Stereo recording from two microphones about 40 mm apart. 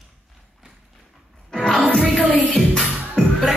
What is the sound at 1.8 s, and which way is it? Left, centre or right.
Music, centre.